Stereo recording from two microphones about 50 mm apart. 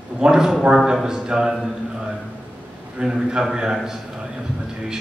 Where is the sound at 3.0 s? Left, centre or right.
Centre.